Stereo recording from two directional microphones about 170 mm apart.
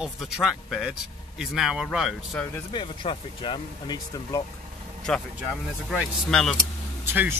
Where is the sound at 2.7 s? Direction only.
30° left (ahead or behind).